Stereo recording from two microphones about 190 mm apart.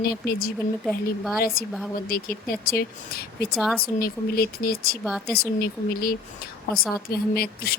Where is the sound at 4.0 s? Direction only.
50° left (ahead or behind).